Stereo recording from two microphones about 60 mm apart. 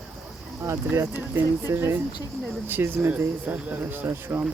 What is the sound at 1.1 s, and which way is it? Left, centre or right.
Speech, right.